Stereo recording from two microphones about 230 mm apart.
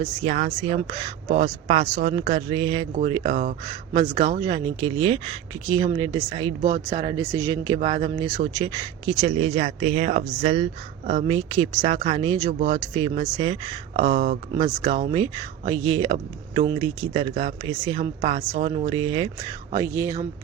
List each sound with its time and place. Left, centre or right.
0.0 s speech: right
6.6 s speech: right
6.9 s speech: centre